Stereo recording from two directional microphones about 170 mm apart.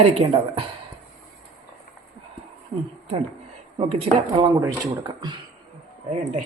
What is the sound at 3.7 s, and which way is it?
Speech, 30° right (ahead or behind).